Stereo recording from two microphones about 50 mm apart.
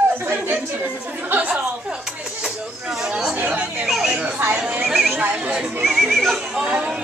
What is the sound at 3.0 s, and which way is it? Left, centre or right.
Chatter, centre.